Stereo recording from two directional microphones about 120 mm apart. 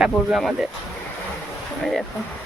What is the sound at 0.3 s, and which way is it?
Speech, centre (ahead or behind).